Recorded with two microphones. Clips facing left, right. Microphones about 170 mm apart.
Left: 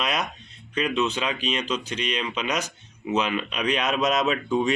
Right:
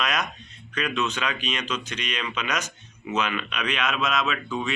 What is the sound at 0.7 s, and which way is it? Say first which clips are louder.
Speech: left 3 dB; 30° left (ahead or behind).